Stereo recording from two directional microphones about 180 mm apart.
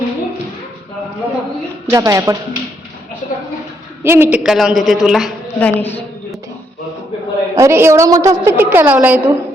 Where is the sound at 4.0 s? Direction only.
15° right (ahead or behind).